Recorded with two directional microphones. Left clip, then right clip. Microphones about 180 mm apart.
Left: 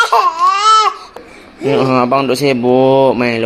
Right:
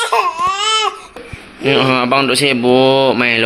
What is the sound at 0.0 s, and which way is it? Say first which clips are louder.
Baby cry: left 4 dB; 15° left (ahead or behind).